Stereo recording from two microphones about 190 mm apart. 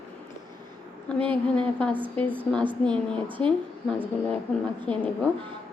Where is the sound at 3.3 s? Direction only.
25° right (ahead or behind).